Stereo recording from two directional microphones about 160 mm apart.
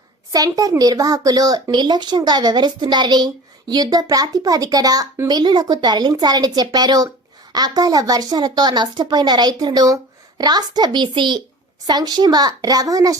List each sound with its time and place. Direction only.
0.3 s speech: 25° right (ahead or behind)